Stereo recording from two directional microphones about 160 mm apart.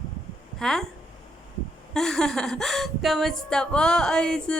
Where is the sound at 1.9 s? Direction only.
5° left (ahead or behind).